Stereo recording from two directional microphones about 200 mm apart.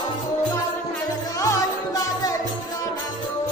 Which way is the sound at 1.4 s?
15° left (ahead or behind).